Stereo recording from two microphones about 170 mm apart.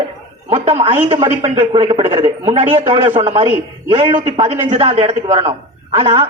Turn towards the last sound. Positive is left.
turn(degrees=-25)  # may be behind; listen again after turning